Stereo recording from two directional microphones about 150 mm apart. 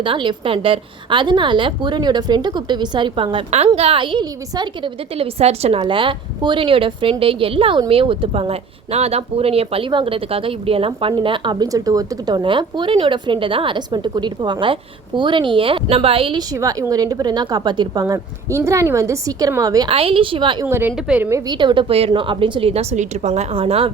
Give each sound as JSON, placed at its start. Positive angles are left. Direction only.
{"t": 0.0, "sound": "a woman's voice", "side_deg": -35}
{"t": 3.3, "sound": "a woman's voice", "side_deg": -45}
{"t": 16.5, "sound": "a woman's voice", "side_deg": -25}
{"t": 18.0, "sound": "a woman's voice", "side_deg": -20}
{"t": 19.9, "sound": "a woman's voice", "side_deg": -40}
{"t": 20.7, "sound": "a woman's voice", "side_deg": -15}
{"t": 21.2, "sound": "a woman's voice", "side_deg": -25}